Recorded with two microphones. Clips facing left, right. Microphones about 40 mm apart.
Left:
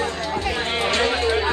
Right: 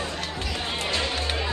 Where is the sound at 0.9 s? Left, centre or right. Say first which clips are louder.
Left 9 dB; left.